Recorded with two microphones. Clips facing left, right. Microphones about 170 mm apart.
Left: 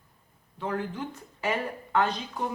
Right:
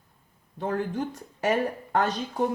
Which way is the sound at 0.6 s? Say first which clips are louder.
Right 4 dB; 45° right (ahead or behind).